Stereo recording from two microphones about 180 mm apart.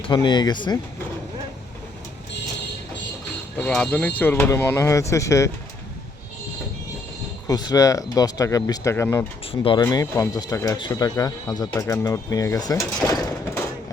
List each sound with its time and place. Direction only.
0.1 s speech: 25° left (ahead or behind)
3.6 s speech: 5° left (ahead or behind)
7.4 s speech: 20° left (ahead or behind)
9.5 s speech: 30° left (ahead or behind)
9.8 s speech: 20° left (ahead or behind)
13.1 s a sound: 15° left (ahead or behind)